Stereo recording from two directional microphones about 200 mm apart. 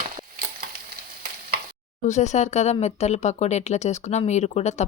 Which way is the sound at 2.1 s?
35° left (ahead or behind).